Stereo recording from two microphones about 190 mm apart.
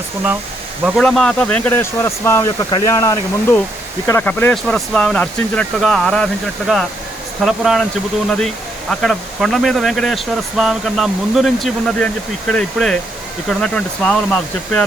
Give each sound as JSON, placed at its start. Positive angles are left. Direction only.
{"t": 0.9, "sound": "speech", "side_deg": 0}
{"t": 7.4, "sound": "speech", "side_deg": 0}